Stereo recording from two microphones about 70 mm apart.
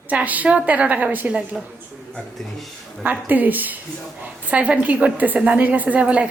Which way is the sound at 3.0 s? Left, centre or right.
Right.